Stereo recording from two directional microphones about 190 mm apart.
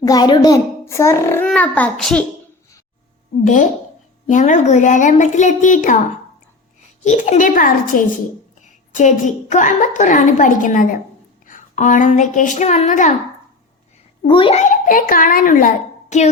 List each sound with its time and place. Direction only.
0.0 s a child's voice: 20° left (ahead or behind); by 2.2 s 5° left (ahead or behind)
3.4 s a woman's voice: 40° left (ahead or behind)
7.0 s a child's voice: 40° left (ahead or behind)
14.3 s a child's voice: 25° left (ahead or behind)
14.6 s a child's voice: 45° left (ahead or behind)